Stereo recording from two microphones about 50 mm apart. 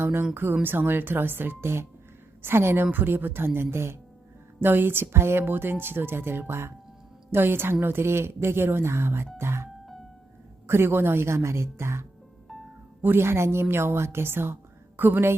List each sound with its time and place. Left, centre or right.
0.0 s a woman's voice: right
2.8 s a woman's voice: right
4.6 s a woman's voice: right
9.4 s music: right
10.7 s a woman's voice: right
13.0 s a woman's voice: right